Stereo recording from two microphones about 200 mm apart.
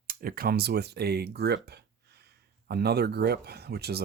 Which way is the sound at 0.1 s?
45° right (ahead or behind).